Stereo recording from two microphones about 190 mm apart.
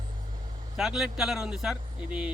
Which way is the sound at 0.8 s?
Centre (ahead or behind).